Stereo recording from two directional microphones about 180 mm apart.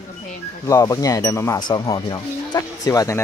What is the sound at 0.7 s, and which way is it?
Speech, 20° left (ahead or behind).